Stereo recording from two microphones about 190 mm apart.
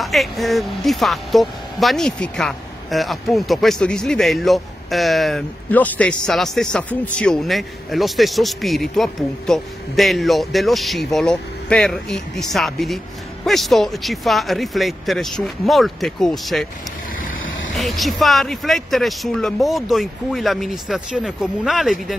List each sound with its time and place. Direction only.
0.0 s a woman's voice: centre (ahead or behind)
17.4 s vehicle: 90° left
17.7 s a woman's voice: centre (ahead or behind)